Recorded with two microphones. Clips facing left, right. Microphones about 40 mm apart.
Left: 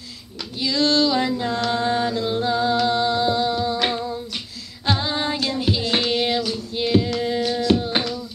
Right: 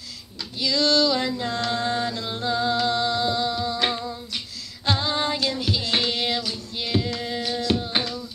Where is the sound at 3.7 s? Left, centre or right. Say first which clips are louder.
Left 3 dB; centre.